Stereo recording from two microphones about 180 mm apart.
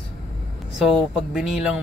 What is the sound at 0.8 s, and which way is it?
Speech, 5° right (ahead or behind).